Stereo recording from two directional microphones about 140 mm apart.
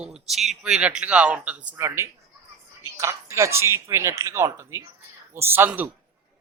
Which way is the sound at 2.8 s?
20° right (ahead or behind).